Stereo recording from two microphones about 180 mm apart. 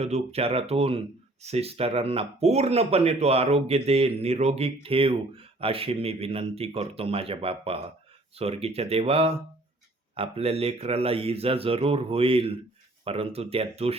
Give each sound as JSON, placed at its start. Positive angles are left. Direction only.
{"t": 0.0, "sound": "speech", "side_deg": -35}